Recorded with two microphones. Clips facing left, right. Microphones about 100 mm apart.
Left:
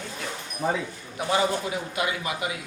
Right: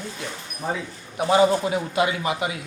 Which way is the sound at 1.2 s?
25° right (ahead or behind).